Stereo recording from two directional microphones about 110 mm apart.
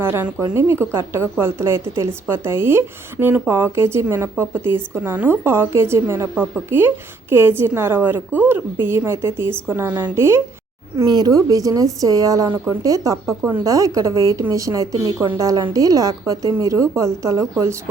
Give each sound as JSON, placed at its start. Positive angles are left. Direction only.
{"t": 0.0, "sound": "a woman's voice", "side_deg": -20}
{"t": 10.9, "sound": "a woman's voice", "side_deg": -40}